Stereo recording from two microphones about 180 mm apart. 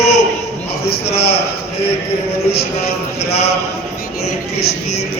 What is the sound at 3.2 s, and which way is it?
Speech, 35° left (ahead or behind).